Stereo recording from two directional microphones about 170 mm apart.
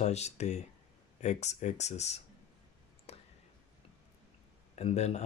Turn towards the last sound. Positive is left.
turn(degrees=40)  # may be behind; listen again after turning